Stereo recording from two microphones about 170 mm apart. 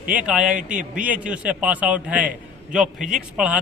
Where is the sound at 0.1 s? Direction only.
5° right (ahead or behind).